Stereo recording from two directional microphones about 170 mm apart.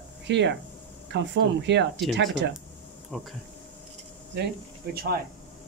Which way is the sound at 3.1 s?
5° left (ahead or behind).